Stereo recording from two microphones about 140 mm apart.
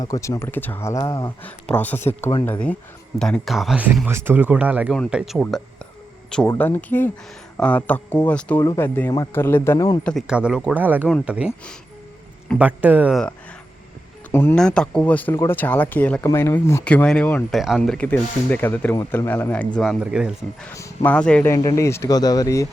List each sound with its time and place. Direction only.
0.0 s speech: 25° left (ahead or behind)
1.5 s speech: 10° left (ahead or behind)
6.6 s speech: 10° left (ahead or behind)
8.6 s speech: 25° left (ahead or behind)
10.0 s speech: 5° left (ahead or behind)
10.2 s speech: 5° right (ahead or behind)
12.5 s speech: 10° right (ahead or behind)
14.3 s speech: 15° left (ahead or behind)
16.8 s speech: 10° left (ahead or behind)
19.8 s speech: 5° right (ahead or behind)
20.7 s speech: 20° left (ahead or behind)
21.1 s speech: 10° left (ahead or behind)
21.5 s speech: 25° left (ahead or behind)